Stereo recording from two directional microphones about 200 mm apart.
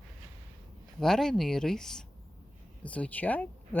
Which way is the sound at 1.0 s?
Centre (ahead or behind).